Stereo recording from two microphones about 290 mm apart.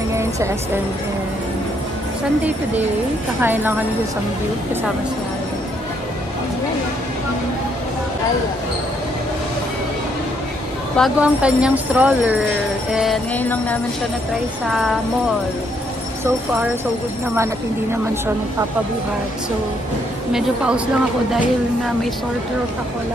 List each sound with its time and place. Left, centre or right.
0.1 s music: centre
2.4 s a woman's voice: centre
11.0 s a woman's voice: centre
20.3 s a woman's voice: centre